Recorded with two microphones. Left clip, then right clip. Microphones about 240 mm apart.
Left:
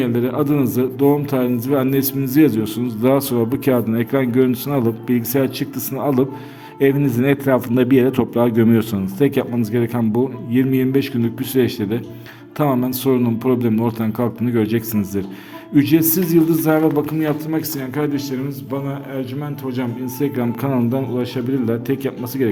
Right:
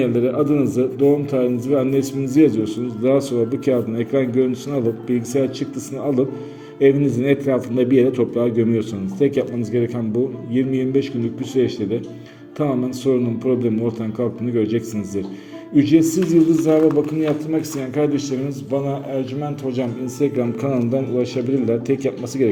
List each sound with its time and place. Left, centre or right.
0.0 s a man's voice: left